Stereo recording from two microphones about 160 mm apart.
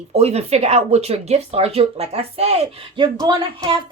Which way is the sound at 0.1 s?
40° right (ahead or behind).